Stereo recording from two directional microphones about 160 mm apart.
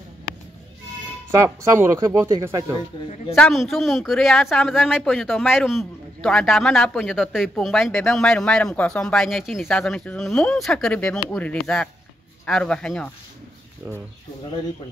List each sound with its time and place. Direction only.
1.3 s speech: 20° right (ahead or behind)
3.3 s speech: centre (ahead or behind)